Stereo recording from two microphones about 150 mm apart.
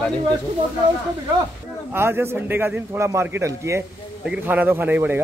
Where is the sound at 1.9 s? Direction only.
15° right (ahead or behind).